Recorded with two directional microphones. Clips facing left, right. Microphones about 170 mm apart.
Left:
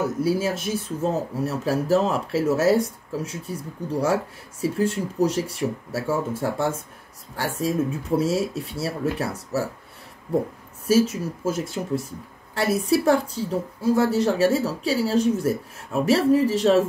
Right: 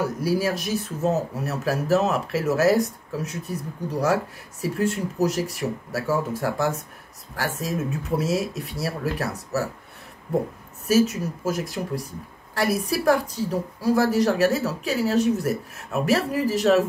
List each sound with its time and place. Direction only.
0.0 s speech: 25° left (ahead or behind)
10.9 s speech: 30° left (ahead or behind)